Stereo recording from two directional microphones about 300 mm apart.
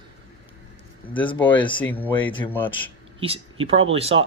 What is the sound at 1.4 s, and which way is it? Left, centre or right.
A man's voice, centre.